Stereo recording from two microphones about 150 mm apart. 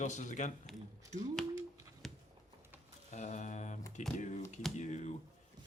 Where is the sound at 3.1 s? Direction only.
55° left (ahead or behind).